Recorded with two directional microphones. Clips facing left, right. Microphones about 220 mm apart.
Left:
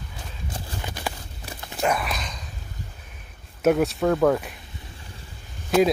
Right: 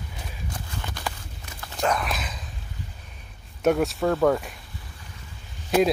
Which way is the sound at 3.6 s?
Centre (ahead or behind).